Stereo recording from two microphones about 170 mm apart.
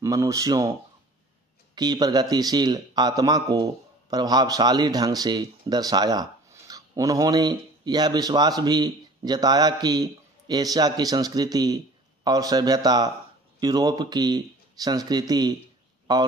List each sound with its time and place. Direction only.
0.0 s speech: 20° right (ahead or behind)
1.8 s speech: 25° right (ahead or behind)